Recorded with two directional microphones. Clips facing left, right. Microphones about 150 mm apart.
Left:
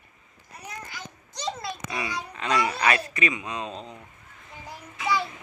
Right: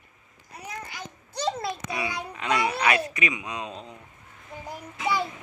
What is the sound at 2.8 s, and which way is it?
Speech, 10° right (ahead or behind).